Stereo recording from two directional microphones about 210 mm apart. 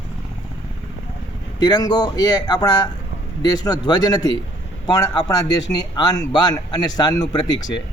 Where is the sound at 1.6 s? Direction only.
20° left (ahead or behind).